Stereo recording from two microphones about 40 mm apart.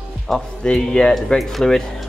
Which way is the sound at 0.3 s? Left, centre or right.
Centre.